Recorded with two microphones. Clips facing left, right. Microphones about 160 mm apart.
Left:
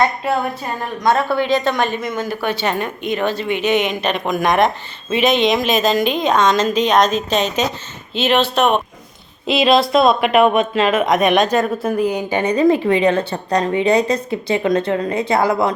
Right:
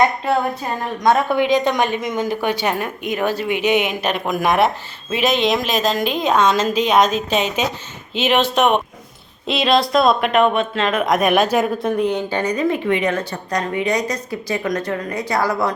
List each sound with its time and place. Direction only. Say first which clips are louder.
1.0 s a woman's voice: right 1 dB; 15° right (ahead or behind)
9.5 s a woman's voice: left 3 dB; 5° left (ahead or behind)
12.4 s a woman's voice: left 8 dB; 30° left (ahead or behind)